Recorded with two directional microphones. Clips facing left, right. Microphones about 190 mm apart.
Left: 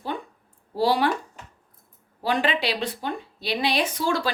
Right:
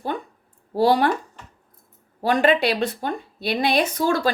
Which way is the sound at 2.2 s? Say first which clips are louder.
Right 6 dB; 50° right (ahead or behind).